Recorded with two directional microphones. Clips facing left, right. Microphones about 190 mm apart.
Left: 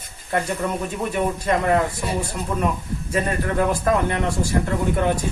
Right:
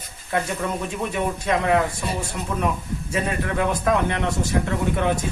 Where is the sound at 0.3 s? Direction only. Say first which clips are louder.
Left 1 dB; centre (ahead or behind).